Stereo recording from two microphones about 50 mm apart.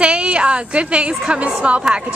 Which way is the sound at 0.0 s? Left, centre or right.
Centre.